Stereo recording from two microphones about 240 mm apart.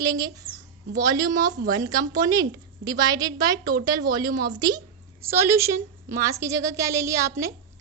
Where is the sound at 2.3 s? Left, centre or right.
Centre.